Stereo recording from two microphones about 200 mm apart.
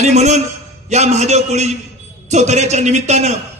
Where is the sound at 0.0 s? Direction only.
35° right (ahead or behind).